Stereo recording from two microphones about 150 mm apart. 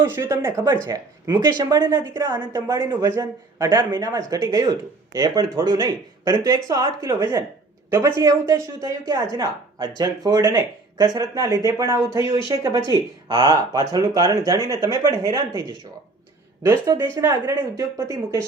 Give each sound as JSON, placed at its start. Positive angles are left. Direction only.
{"t": 0.0, "sound": "a man's voice", "side_deg": -15}
{"t": 16.6, "sound": "a man's voice", "side_deg": -20}